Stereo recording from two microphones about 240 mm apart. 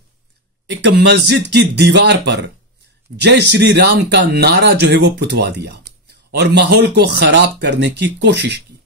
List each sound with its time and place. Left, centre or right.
0.7 s speech: right